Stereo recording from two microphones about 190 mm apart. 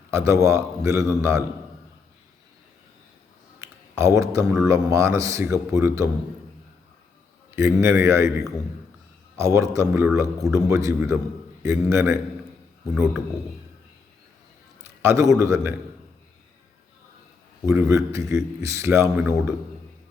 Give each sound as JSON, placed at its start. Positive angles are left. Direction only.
{"t": 0.1, "sound": "speech", "side_deg": -15}
{"t": 3.6, "sound": "speech", "side_deg": -15}
{"t": 7.5, "sound": "speech", "side_deg": -15}
{"t": 14.8, "sound": "a man's voice", "side_deg": -15}
{"t": 17.7, "sound": "speech", "side_deg": -15}